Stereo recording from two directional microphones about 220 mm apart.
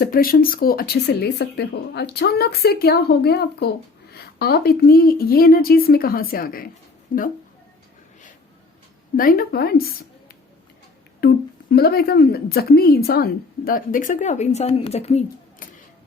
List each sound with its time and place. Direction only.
0.0 s a woman's voice: 40° left (ahead or behind)
9.1 s a woman's voice: 40° left (ahead or behind)
11.2 s a woman's voice: 45° left (ahead or behind)